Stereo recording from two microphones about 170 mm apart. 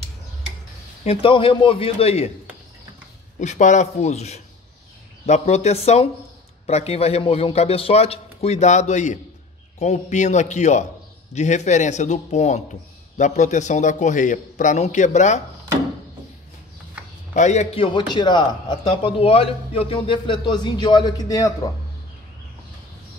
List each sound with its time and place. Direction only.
1.0 s a man's voice: 30° left (ahead or behind)
3.3 s a man's voice: 45° left (ahead or behind)
17.3 s a man's voice: 45° left (ahead or behind)
17.8 s a man's voice: 30° left (ahead or behind)